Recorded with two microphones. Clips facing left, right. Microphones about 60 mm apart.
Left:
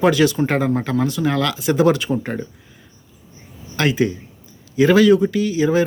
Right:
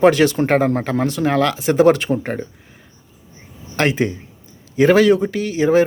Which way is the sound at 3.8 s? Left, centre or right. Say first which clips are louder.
Even; right.